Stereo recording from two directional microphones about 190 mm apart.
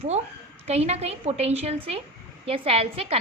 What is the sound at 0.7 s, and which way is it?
A woman's voice, 35° right (ahead or behind).